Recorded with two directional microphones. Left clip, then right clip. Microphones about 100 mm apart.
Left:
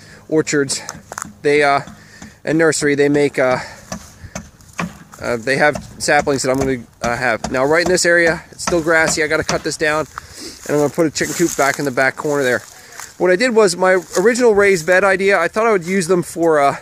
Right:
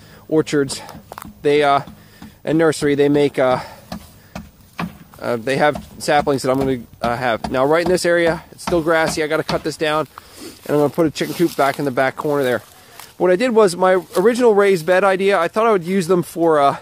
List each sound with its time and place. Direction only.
0.3 s speech: 15° right (ahead or behind)
0.8 s speech: 20° left (ahead or behind)
1.4 s speech: 15° right (ahead or behind)
5.2 s speech: 15° right (ahead or behind)
13.2 s speech: 15° right (ahead or behind)